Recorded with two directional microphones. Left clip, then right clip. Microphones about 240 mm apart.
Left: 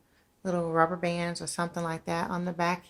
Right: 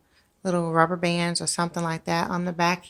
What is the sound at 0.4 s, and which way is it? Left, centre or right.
Speech, right.